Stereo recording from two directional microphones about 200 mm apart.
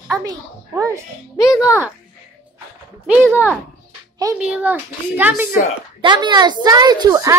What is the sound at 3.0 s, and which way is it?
A child's voice, 10° right (ahead or behind).